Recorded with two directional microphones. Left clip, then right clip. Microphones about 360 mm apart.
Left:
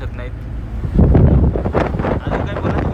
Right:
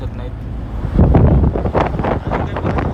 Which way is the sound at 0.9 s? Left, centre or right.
Centre.